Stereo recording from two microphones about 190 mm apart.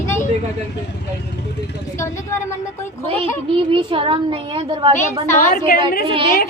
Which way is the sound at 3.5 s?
25° right (ahead or behind).